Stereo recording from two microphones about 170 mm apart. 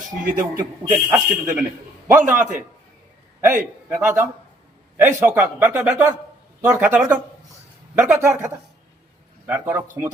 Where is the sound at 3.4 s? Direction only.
15° right (ahead or behind).